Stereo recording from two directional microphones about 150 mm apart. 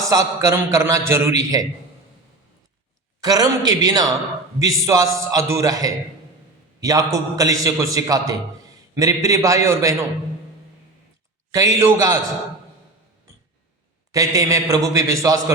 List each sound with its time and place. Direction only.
0.0 s a man's voice: 20° right (ahead or behind)
3.2 s a man's voice: 25° right (ahead or behind)
11.5 s a man's voice: 20° right (ahead or behind)
14.1 s a man's voice: 25° right (ahead or behind)